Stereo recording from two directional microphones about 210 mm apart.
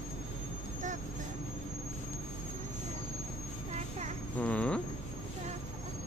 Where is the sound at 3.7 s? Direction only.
30° right (ahead or behind).